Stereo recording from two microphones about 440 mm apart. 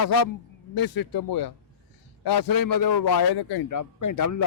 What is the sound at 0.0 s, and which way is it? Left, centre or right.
A man's voice, left.